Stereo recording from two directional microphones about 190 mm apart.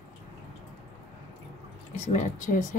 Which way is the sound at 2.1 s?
40° left (ahead or behind).